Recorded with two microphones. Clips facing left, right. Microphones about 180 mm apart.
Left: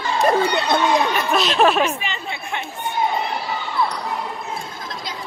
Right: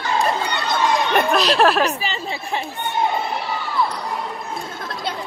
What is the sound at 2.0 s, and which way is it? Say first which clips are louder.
Chatter: right 2 dB; 35° right (ahead or behind).